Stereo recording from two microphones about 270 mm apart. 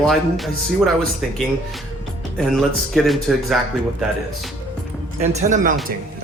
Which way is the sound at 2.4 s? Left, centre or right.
Centre.